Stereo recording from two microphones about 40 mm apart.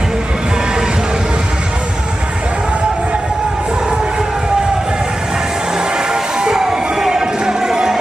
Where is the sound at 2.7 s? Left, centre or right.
Right.